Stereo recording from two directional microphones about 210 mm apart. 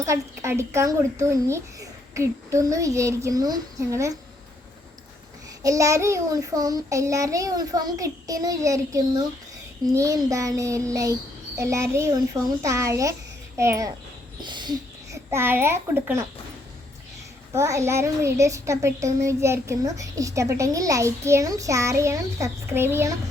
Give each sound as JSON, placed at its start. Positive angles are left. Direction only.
{"t": 0.0, "sound": "a child's voice", "side_deg": -15}
{"t": 5.6, "sound": "a child's voice", "side_deg": -15}
{"t": 17.5, "sound": "a child's voice", "side_deg": -15}